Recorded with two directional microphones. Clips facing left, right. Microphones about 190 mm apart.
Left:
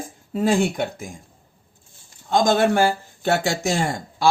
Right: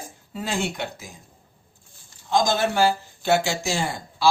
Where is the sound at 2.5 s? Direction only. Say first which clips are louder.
Left 3 dB; 55° left (ahead or behind).